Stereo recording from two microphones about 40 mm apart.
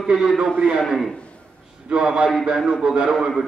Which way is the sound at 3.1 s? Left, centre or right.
Centre.